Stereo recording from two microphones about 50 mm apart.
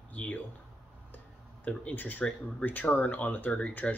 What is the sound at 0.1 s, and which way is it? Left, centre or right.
Speech, left.